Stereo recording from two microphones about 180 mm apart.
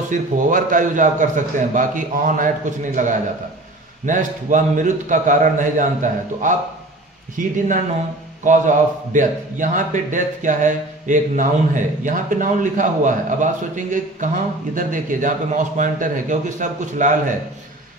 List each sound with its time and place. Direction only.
0.1 s a man's voice: 45° right (ahead or behind)
7.3 s a man's voice: 45° right (ahead or behind)